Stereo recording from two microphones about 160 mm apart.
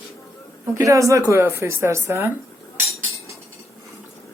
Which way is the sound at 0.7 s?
20° right (ahead or behind).